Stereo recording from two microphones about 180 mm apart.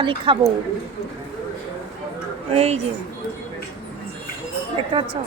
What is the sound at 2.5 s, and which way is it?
Speech, 35° right (ahead or behind).